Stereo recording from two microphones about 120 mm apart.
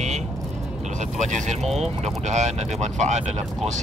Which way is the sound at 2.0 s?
80° right.